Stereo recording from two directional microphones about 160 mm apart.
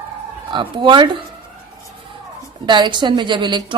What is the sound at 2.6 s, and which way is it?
Speech, 30° right (ahead or behind).